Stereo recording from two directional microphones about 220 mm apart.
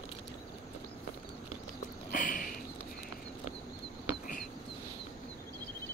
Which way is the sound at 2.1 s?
40° left (ahead or behind).